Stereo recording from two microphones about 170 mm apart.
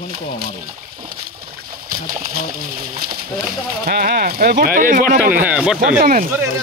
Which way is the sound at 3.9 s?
65° right (ahead or behind).